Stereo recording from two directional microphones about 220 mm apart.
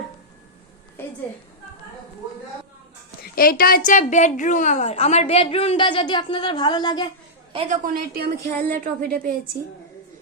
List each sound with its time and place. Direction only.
3.3 s a woman's voice: 40° left (ahead or behind); by 7.1 s 20° left (ahead or behind)
7.5 s a woman's voice: 30° right (ahead or behind)
8.1 s a woman's voice: 40° right (ahead or behind)